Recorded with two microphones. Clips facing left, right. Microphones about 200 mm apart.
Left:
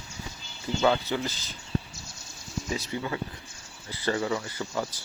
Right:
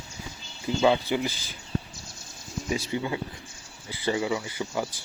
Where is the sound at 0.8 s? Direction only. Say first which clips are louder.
Right 2 dB; 15° right (ahead or behind).